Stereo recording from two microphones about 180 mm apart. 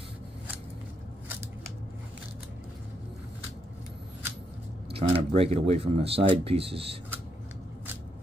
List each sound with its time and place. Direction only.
4.9 s speech: 30° right (ahead or behind)